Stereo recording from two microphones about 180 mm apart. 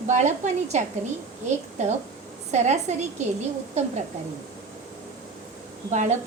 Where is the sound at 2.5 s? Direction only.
40° right (ahead or behind).